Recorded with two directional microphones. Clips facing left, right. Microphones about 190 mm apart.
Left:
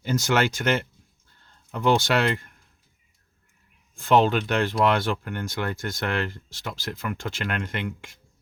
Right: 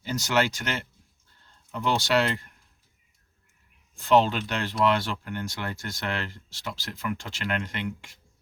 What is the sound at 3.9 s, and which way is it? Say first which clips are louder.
Speech: left 2 dB; 50° left (ahead or behind).